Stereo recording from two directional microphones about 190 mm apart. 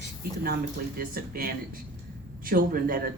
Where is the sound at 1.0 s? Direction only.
50° right (ahead or behind).